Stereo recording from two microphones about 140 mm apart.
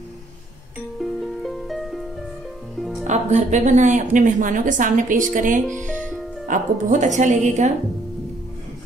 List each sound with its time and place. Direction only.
0.9 s music: centre (ahead or behind)
3.0 s speech: 55° right (ahead or behind)
5.9 s music: 10° left (ahead or behind)
6.4 s speech: 65° right (ahead or behind)